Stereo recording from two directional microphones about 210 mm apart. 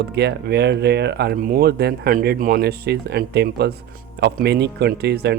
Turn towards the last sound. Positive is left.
turn(degrees=-50)  # may be behind; listen again after turning